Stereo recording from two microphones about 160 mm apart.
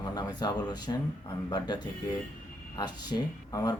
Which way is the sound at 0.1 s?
25° left (ahead or behind).